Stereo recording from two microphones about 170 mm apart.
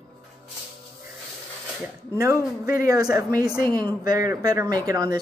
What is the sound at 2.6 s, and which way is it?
A woman's voice, 60° left (ahead or behind).